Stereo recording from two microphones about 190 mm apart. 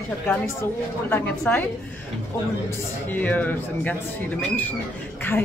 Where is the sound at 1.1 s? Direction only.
10° left (ahead or behind).